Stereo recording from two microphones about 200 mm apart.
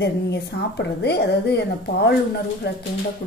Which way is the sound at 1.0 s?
55° left (ahead or behind).